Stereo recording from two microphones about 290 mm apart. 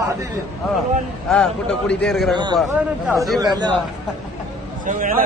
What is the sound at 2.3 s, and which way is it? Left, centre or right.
Speech, centre.